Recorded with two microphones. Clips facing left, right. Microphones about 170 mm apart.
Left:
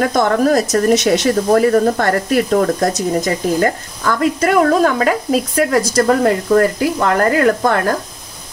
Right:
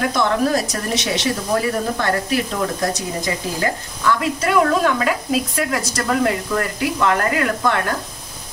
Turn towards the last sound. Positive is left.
turn(degrees=40)  # may be behind; listen again after turning